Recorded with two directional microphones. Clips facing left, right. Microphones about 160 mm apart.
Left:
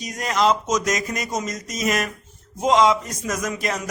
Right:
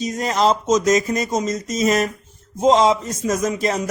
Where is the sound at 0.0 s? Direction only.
25° right (ahead or behind).